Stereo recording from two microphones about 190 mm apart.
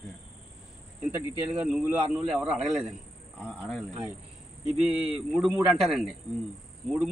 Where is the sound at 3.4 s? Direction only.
5° left (ahead or behind).